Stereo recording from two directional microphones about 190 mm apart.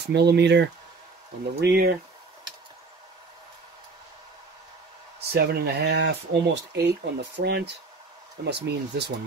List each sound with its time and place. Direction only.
0.0 s speech: 60° right (ahead or behind)
5.3 s speech: 55° right (ahead or behind)